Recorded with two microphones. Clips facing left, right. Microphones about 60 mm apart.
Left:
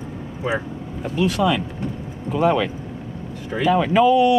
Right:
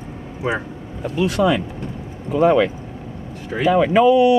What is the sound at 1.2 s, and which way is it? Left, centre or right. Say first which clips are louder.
Speech: right 2 dB; centre.